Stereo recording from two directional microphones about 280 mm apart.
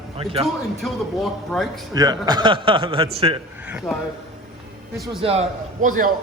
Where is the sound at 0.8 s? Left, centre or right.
Centre.